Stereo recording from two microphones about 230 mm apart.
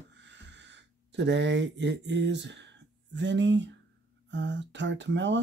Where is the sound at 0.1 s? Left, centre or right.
Right.